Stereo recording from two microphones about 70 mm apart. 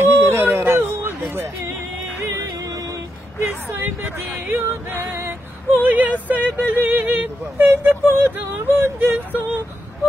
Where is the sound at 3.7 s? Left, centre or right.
Right.